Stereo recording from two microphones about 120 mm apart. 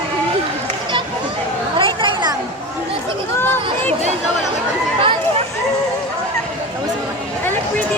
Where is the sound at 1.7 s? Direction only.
45° right (ahead or behind).